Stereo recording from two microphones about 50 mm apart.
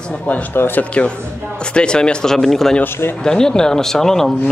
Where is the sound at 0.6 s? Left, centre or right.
Left.